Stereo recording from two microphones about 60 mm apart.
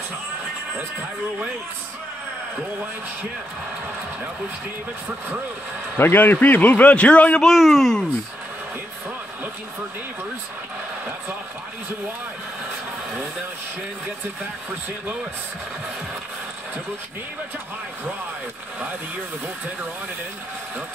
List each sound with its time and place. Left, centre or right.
5.9 s a man's voice: left
7.4 s speech: centre